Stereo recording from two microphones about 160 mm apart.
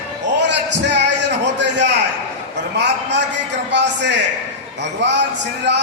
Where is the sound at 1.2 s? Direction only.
90° right.